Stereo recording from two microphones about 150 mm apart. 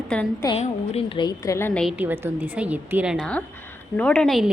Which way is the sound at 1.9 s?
15° right (ahead or behind).